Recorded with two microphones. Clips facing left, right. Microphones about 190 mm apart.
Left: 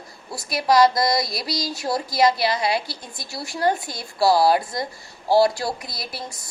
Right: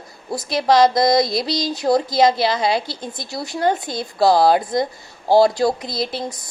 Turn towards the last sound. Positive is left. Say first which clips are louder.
# right 9 dB
turn(degrees=-25)  # may be behind; listen again after turning